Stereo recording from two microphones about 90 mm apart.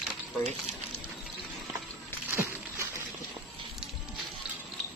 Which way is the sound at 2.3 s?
30° right (ahead or behind).